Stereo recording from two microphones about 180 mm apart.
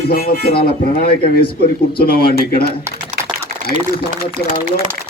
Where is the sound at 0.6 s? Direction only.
55° left (ahead or behind).